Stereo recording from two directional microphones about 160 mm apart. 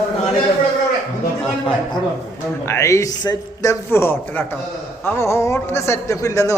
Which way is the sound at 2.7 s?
15° left (ahead or behind).